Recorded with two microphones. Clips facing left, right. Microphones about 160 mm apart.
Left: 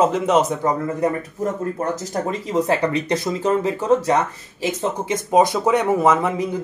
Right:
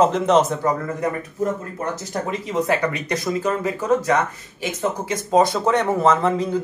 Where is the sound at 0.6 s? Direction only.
25° left (ahead or behind).